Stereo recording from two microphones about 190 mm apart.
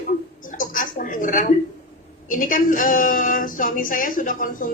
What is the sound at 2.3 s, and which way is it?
A woman's voice, 45° left (ahead or behind).